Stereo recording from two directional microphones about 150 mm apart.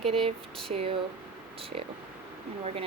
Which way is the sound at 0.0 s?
40° right (ahead or behind).